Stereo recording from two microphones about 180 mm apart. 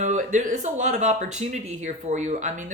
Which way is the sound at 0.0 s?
40° right (ahead or behind).